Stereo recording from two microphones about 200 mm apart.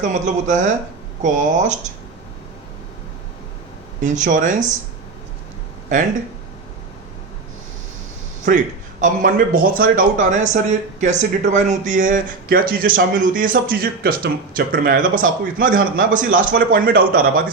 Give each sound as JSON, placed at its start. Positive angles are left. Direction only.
{"t": 0.0, "sound": "speech", "side_deg": -40}
{"t": 4.0, "sound": "speech", "side_deg": -40}
{"t": 9.0, "sound": "speech", "side_deg": -45}